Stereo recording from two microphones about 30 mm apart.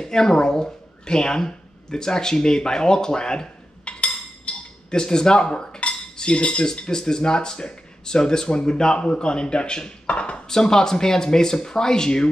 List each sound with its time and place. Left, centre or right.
0.0 s speech: left
3.8 s a sound: left
4.9 s speech: left
6.1 s cutlery: left
6.6 s speech: left
10.5 s speech: left